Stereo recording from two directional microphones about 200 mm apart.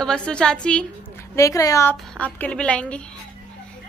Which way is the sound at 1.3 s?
15° left (ahead or behind).